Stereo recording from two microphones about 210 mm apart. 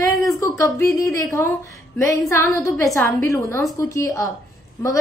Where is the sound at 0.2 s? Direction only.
15° left (ahead or behind).